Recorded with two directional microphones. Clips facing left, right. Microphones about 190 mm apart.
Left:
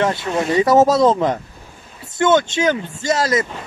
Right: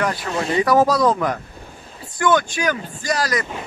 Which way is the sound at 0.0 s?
25° left (ahead or behind).